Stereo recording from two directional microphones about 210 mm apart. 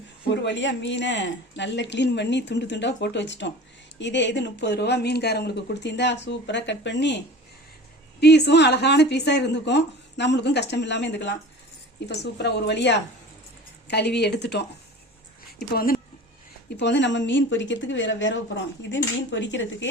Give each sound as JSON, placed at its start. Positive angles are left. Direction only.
{"t": 0.3, "sound": "speech", "side_deg": 60}
{"t": 8.2, "sound": "a woman's voice", "side_deg": 55}
{"t": 16.7, "sound": "speech", "side_deg": 55}